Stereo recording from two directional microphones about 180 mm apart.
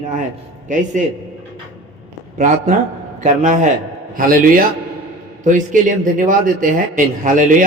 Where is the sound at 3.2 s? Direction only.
40° right (ahead or behind).